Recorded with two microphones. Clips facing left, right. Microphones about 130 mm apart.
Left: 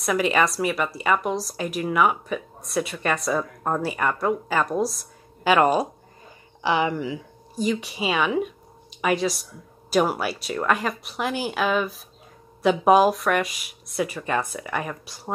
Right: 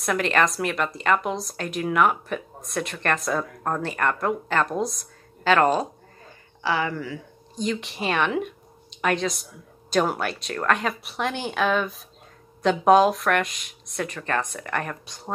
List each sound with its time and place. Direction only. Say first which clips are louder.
0.0 s a woman's voice: left 1 dB; 5° left (ahead or behind)
7.6 s a woman's voice: left 2 dB; 5° left (ahead or behind)